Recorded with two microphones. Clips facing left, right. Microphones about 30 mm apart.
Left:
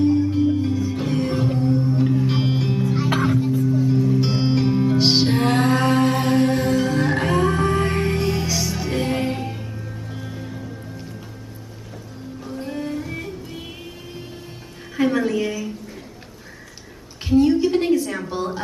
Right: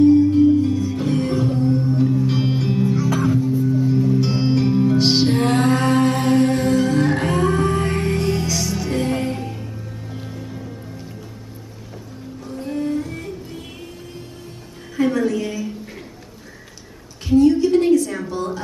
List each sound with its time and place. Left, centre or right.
0.0 s music: centre
1.4 s singing bowl: centre
1.7 s singing bowl: centre
2.0 s music: left
2.4 s music: centre
3.0 s music: left
3.5 s music: centre
12.4 s music: centre
15.0 s a sound: centre
17.4 s a sound: centre